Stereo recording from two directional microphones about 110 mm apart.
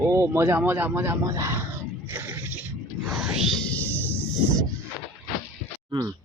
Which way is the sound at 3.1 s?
5° right (ahead or behind).